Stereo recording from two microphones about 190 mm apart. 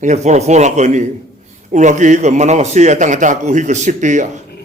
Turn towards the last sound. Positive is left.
turn(degrees=-40)  # may be behind; listen again after turning